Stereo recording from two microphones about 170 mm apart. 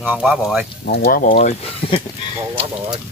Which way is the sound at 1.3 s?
35° left (ahead or behind).